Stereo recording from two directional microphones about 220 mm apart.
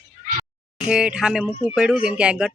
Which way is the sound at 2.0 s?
5° right (ahead or behind).